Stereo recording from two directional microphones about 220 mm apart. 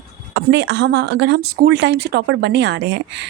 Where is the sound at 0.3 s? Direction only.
55° right (ahead or behind).